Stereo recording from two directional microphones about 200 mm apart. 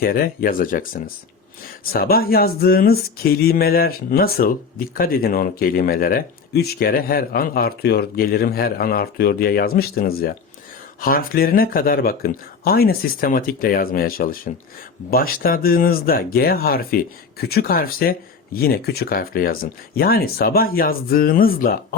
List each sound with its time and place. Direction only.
0.0 s speech: 45° left (ahead or behind)